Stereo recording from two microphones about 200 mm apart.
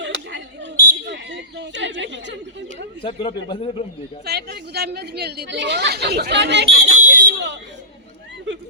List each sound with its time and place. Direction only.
0.0 s a sound: 60° right (ahead or behind)
3.0 s speech: 25° left (ahead or behind)
4.3 s speech: 55° right (ahead or behind)
6.9 s smoke detector: 40° right (ahead or behind)